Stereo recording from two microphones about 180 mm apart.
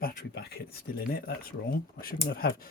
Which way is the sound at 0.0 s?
60° left (ahead or behind).